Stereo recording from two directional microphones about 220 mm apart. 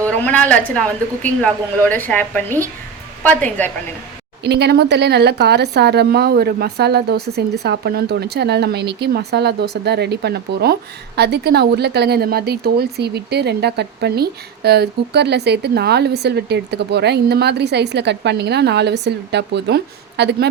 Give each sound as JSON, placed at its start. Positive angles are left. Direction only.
{"t": 0.0, "sound": "a woman's voice", "side_deg": 5}
{"t": 4.4, "sound": "a woman's voice", "side_deg": -50}